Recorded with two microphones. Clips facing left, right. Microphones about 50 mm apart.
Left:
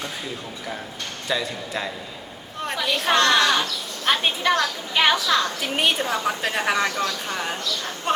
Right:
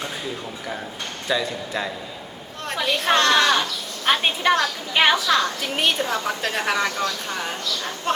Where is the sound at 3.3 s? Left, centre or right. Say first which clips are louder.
Right 1 dB; centre.